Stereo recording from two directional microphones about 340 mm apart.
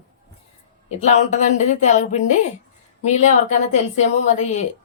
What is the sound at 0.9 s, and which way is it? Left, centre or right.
A woman's voice, centre.